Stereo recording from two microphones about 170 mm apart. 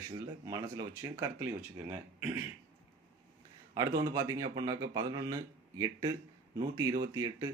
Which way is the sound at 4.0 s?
25° right (ahead or behind).